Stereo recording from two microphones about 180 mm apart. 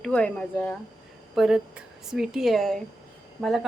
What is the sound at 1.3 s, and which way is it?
A woman's voice, 5° right (ahead or behind).